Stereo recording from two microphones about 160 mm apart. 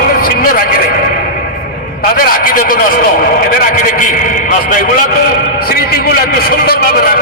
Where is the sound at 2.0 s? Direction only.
65° left (ahead or behind).